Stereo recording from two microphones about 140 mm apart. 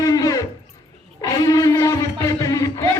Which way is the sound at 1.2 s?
25° left (ahead or behind).